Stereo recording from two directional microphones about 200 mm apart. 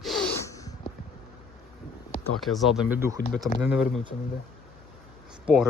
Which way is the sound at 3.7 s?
Centre (ahead or behind).